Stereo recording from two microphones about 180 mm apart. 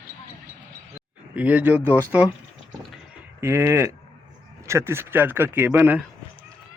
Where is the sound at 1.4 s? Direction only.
10° right (ahead or behind).